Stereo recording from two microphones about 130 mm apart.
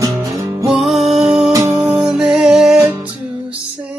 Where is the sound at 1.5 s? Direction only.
25° right (ahead or behind).